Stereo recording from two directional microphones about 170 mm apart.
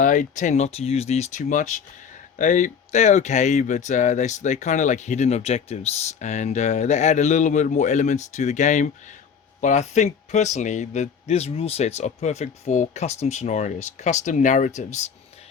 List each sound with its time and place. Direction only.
0.0 s speech: 50° left (ahead or behind)